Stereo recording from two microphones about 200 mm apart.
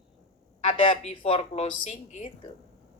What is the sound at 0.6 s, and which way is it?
A woman's voice, 30° left (ahead or behind).